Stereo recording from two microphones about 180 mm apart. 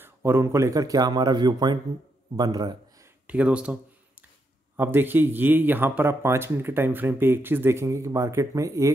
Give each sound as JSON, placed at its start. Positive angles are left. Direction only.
{"t": 0.0, "sound": "a man's voice", "side_deg": -15}
{"t": 3.3, "sound": "speech", "side_deg": -5}
{"t": 4.7, "sound": "speech", "side_deg": -10}